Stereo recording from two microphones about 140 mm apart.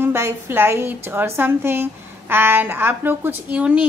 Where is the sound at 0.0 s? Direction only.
15° right (ahead or behind).